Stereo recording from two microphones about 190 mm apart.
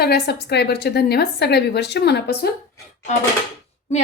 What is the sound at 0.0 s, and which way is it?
A woman's voice, 60° left (ahead or behind).